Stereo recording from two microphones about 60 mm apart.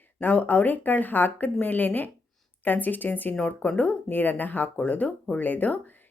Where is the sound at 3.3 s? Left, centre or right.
Centre.